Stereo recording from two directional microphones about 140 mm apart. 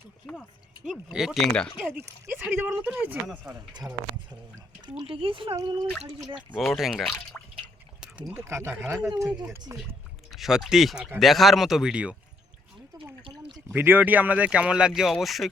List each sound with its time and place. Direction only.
1.1 s speech: centre (ahead or behind)
2.0 s speech: 15° right (ahead or behind)
3.7 s speech: 30° right (ahead or behind)
6.5 s speech: centre (ahead or behind)
7.3 s drip: 15° left (ahead or behind)
8.3 s speech: 20° right (ahead or behind)
9.3 s speech: 10° right (ahead or behind)
13.7 s speech: 15° right (ahead or behind)